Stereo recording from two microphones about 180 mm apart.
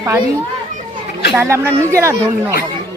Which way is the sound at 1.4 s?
15° right (ahead or behind).